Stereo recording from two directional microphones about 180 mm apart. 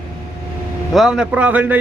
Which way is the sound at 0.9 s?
5° right (ahead or behind).